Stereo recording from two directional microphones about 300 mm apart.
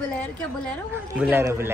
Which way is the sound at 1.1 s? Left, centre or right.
Centre.